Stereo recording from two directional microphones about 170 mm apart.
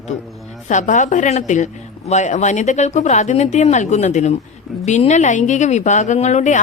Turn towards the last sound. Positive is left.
turn(degrees=45)  # may be behind; listen again after turning